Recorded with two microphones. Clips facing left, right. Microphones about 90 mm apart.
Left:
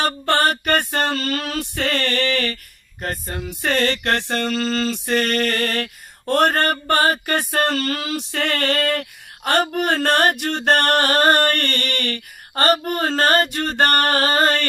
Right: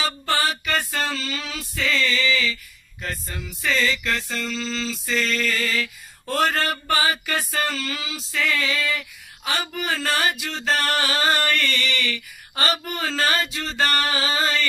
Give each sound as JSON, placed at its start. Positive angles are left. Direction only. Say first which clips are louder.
{"t": 0.3, "sound": "male singing", "louder": "left 6 dB", "side_deg": 55}